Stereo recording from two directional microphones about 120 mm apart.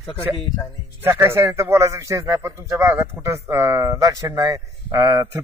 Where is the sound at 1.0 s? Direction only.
20° right (ahead or behind).